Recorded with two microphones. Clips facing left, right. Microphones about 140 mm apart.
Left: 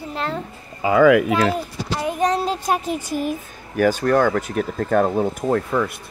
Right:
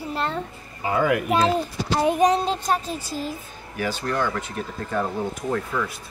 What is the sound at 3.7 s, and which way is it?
Speech, 50° left (ahead or behind).